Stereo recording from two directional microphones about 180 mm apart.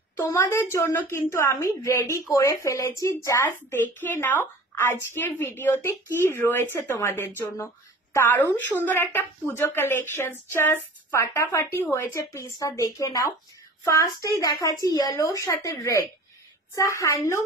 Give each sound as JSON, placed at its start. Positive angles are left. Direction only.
{"t": 0.2, "sound": "a child's voice", "side_deg": 15}